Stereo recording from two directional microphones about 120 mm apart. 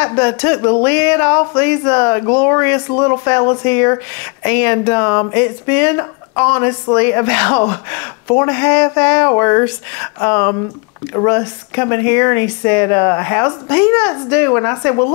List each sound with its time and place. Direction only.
0.0 s speech: 25° left (ahead or behind)